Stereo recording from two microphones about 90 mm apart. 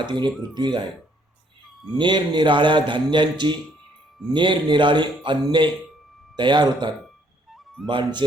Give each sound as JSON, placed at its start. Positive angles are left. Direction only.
{"t": 0.0, "sound": "a man's voice", "side_deg": -60}
{"t": 2.0, "sound": "a man's voice", "side_deg": -55}